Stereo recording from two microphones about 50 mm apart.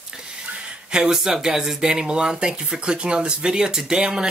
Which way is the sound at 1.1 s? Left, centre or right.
Centre.